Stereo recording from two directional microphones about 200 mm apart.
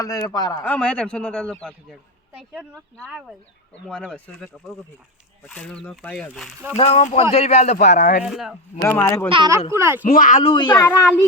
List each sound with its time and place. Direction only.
0.0 s a man's voice: 15° left (ahead or behind)
6.7 s speech: 30° left (ahead or behind)
8.2 s a man's voice: centre (ahead or behind)
8.8 s a man's voice: 10° left (ahead or behind)
9.3 s speech: 25° right (ahead or behind)
9.7 s speech: 10° right (ahead or behind)
10.0 s speech: 40° left (ahead or behind)
10.4 s speech: 25° left (ahead or behind)
10.8 s a man's voice: 10° left (ahead or behind)